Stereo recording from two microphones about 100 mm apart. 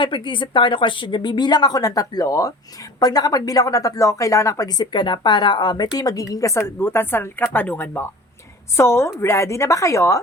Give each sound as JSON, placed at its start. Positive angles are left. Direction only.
{"t": 0.0, "sound": "a woman's voice", "side_deg": 55}